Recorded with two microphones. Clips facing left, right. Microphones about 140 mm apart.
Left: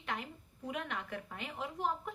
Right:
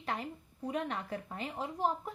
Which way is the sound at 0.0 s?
35° right (ahead or behind).